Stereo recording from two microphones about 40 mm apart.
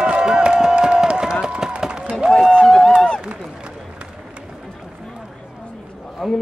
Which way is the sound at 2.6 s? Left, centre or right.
Centre.